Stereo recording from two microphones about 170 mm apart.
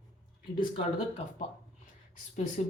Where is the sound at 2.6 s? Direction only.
40° left (ahead or behind).